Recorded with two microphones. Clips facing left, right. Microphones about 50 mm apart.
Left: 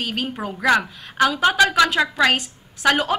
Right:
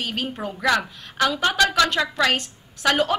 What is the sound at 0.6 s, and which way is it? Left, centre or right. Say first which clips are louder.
A woman's voice: left 3 dB; centre.